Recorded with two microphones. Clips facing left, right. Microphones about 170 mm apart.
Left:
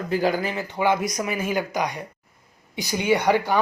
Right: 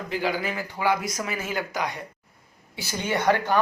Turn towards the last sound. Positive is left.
turn(degrees=10)  # may be behind; listen again after turning